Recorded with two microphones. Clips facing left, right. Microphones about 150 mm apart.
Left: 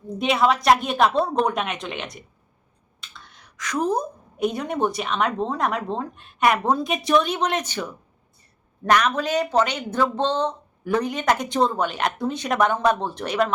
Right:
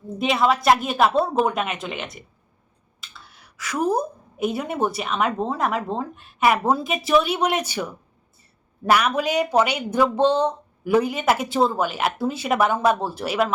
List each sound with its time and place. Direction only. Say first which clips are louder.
0.2 s speech: even; centre (ahead or behind)